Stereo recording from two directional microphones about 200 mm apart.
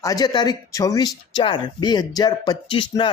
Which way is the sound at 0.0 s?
20° left (ahead or behind).